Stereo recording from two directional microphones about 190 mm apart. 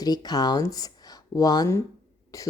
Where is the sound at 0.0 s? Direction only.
20° left (ahead or behind).